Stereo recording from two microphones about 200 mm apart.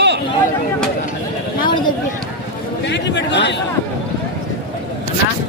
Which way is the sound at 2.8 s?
60° left (ahead or behind).